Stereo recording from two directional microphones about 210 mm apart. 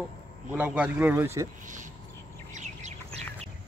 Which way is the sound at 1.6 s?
35° right (ahead or behind).